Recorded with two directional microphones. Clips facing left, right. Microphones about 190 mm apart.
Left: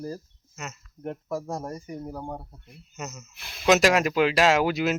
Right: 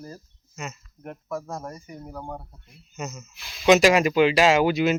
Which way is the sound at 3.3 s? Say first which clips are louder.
Left 1 dB; 55° left (ahead or behind).